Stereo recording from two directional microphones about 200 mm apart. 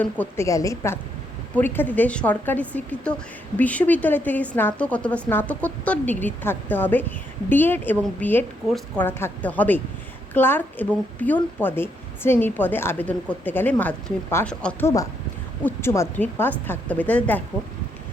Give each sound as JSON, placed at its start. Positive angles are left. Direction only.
{"t": 0.0, "sound": "a woman's voice", "side_deg": 10}